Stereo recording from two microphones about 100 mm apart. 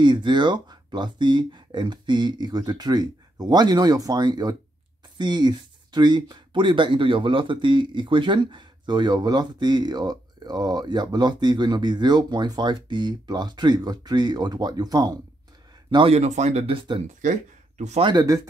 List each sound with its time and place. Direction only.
0.0 s speech: 50° right (ahead or behind)
16.1 s speech: 90° right; by 17.0 s 60° right (ahead or behind)
18.0 s speech: 40° right (ahead or behind)